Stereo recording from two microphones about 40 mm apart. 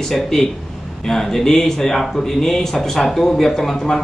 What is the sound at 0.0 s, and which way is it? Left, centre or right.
Speech, centre.